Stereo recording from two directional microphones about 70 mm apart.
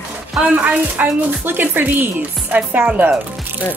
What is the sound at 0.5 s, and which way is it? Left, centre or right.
Speech, right.